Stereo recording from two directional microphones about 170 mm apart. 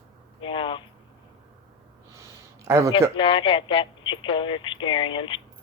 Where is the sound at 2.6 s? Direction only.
15° right (ahead or behind).